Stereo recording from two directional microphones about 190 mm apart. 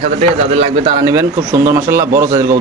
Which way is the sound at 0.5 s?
30° right (ahead or behind).